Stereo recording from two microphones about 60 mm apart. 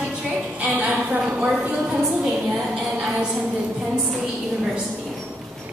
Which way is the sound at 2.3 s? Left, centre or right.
Centre.